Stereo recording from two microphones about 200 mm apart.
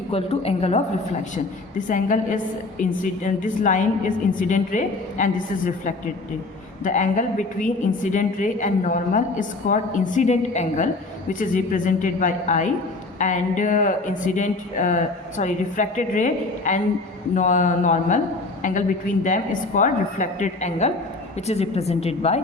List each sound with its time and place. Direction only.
0.1 s a woman's voice: 30° left (ahead or behind)
1.9 s a woman's voice: 40° left (ahead or behind)
19.2 s a woman's voice: 40° left (ahead or behind)